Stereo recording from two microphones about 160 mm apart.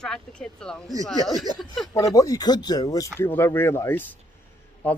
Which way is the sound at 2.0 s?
25° left (ahead or behind).